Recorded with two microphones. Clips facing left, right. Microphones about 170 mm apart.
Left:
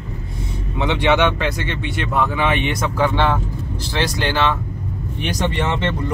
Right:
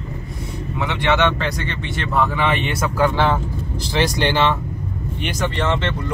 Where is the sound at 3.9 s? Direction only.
15° right (ahead or behind).